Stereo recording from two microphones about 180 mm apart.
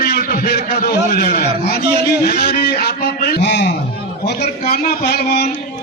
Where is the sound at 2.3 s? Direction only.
65° left (ahead or behind).